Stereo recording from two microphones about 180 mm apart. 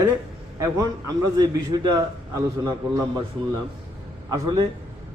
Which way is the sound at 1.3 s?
20° right (ahead or behind).